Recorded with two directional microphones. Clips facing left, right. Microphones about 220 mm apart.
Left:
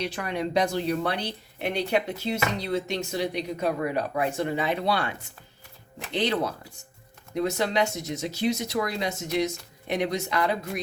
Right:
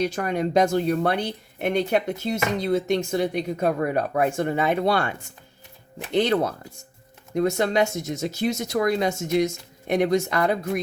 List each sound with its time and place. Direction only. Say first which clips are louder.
0.0 s speech: right 5 dB; 45° right (ahead or behind)